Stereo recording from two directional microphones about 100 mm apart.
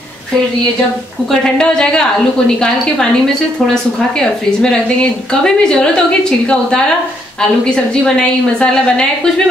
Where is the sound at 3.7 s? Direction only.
5° left (ahead or behind).